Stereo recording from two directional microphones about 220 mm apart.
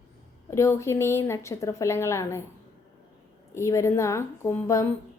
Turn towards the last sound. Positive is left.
turn(degrees=10)  # may be behind; listen again after turning